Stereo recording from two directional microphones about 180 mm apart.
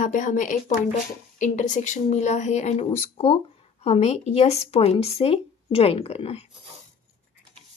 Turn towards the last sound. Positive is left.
turn(degrees=35)  # may be behind; listen again after turning